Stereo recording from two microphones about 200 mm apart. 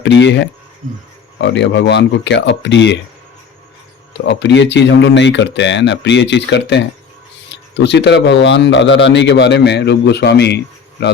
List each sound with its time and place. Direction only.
0.0 s speech: 60° left (ahead or behind)
4.1 s speech: 60° left (ahead or behind)